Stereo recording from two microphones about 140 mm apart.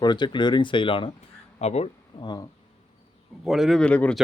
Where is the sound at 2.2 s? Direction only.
30° left (ahead or behind).